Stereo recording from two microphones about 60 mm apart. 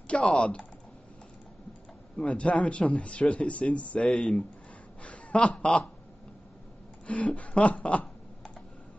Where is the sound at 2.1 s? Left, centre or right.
Centre.